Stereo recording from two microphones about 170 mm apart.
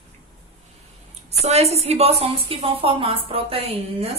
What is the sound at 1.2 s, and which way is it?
A woman's voice, 40° right (ahead or behind).